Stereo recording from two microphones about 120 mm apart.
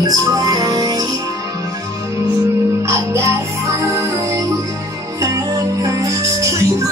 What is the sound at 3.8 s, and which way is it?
Music, 25° right (ahead or behind).